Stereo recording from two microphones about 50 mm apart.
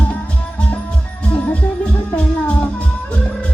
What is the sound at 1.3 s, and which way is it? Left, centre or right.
Music, left.